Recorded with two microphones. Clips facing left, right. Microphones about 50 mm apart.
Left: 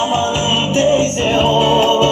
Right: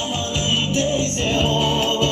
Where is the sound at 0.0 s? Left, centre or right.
Left.